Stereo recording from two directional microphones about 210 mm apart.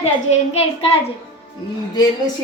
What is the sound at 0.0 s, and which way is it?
Speech, 30° left (ahead or behind).